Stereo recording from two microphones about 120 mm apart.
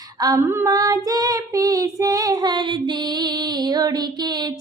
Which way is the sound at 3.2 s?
35° right (ahead or behind).